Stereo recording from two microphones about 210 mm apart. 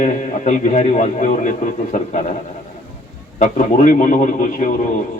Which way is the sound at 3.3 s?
35° left (ahead or behind).